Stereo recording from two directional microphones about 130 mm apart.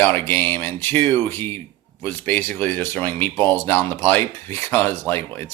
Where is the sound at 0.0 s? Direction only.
15° left (ahead or behind).